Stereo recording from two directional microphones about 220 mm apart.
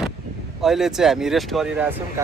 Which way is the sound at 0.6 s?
Centre (ahead or behind).